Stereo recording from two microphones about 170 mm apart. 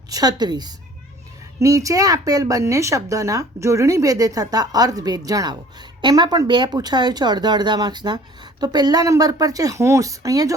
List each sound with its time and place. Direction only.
0.1 s a woman's voice: 25° right (ahead or behind)